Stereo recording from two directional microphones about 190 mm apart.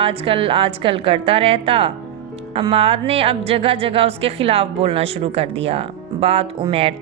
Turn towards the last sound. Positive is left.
turn(degrees=-30)  # may be behind; listen again after turning